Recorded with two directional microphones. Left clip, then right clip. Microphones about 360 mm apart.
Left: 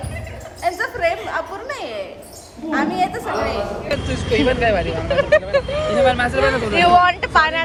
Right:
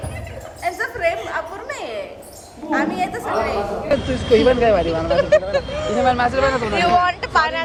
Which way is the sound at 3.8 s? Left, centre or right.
Centre.